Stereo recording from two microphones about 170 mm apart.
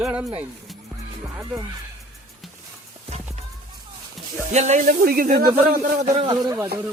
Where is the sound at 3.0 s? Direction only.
40° right (ahead or behind).